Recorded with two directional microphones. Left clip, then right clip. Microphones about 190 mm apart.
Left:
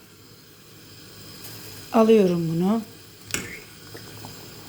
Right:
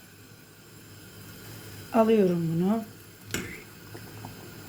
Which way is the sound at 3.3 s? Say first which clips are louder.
Left 4 dB; 35° left (ahead or behind).